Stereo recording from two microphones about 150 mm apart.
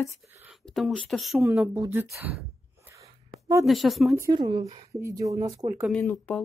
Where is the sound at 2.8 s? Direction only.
20° right (ahead or behind).